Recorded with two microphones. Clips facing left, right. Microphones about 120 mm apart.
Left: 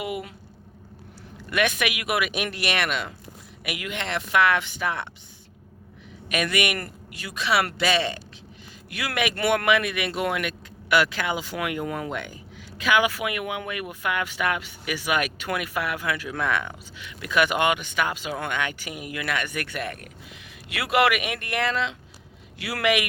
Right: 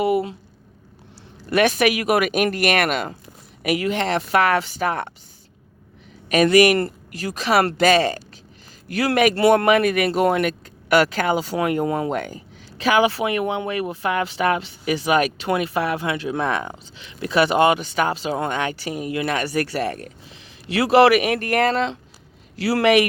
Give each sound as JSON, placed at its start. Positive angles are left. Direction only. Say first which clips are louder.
{"t": 0.0, "sound": "speech", "louder": "right 11 dB", "side_deg": -35}
{"t": 1.4, "sound": "speech", "louder": "right 7 dB", "side_deg": -35}
{"t": 6.2, "sound": "speech", "louder": "right 11 dB", "side_deg": -35}